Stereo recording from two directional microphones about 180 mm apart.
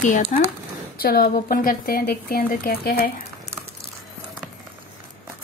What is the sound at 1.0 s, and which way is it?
Speech, 55° left (ahead or behind).